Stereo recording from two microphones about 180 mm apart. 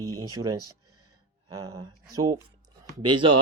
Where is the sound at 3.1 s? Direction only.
30° right (ahead or behind).